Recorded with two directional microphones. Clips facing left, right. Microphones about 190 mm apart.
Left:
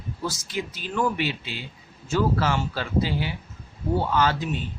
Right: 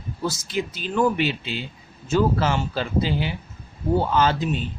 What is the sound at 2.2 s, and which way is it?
Speech, 25° right (ahead or behind).